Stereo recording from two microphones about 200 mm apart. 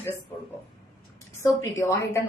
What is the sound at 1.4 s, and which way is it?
Speech, 15° left (ahead or behind).